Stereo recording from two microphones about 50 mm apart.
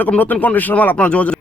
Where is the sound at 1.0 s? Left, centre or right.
Left.